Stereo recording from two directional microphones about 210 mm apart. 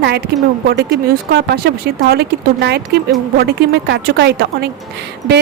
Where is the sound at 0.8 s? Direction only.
50° right (ahead or behind).